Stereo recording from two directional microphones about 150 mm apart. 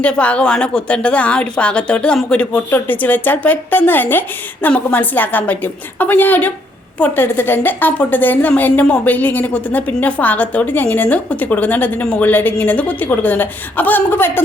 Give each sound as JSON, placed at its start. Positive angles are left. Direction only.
{"t": 0.0, "sound": "a woman's voice", "side_deg": 10}